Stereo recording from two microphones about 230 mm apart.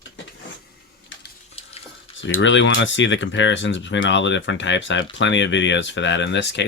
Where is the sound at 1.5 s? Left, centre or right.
Left.